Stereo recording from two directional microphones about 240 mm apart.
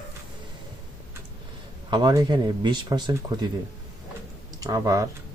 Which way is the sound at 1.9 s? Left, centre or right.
Centre.